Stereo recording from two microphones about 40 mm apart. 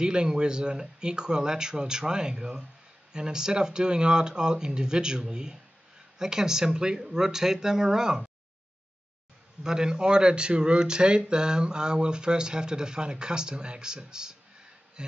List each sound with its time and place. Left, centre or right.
0.0 s speech: right
9.6 s speech: centre